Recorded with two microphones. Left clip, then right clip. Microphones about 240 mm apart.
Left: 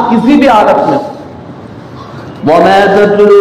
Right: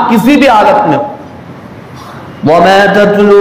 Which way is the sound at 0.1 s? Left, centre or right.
Right.